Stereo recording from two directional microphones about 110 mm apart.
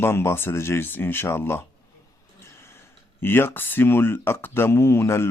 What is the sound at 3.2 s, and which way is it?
Speech, 20° left (ahead or behind).